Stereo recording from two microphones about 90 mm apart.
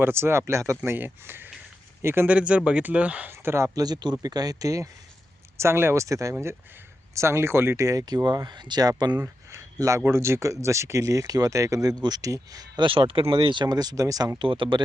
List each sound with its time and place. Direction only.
0.0 s speech: 25° right (ahead or behind)
2.2 s speech: 15° right (ahead or behind)
3.3 s speech: 30° right (ahead or behind)
3.8 s speech: 50° right (ahead or behind)
5.5 s speech: 25° right (ahead or behind); by 9.2 s 45° right (ahead or behind)
9.2 s a sound: 30° right (ahead or behind)
10.1 s speech: 30° right (ahead or behind)
12.8 s speech: 75° right (ahead or behind)
13.3 s speech: 60° right (ahead or behind); by 14.3 s 40° right (ahead or behind)
14.3 s speech: 70° right (ahead or behind)